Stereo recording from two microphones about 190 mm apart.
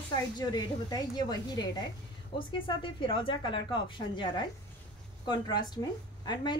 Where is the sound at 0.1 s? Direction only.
20° left (ahead or behind).